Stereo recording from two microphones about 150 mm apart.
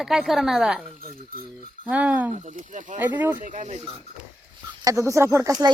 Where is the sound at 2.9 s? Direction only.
10° right (ahead or behind).